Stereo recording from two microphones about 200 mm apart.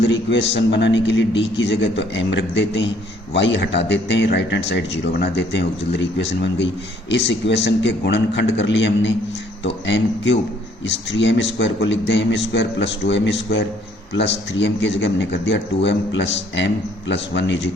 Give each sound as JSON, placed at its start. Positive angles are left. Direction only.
{"t": 0.0, "sound": "a man's voice", "side_deg": 60}